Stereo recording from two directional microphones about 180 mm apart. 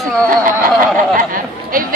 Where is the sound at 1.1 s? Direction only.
50° right (ahead or behind).